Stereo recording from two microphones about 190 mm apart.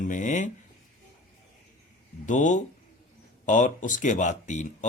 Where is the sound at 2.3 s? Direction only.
40° left (ahead or behind).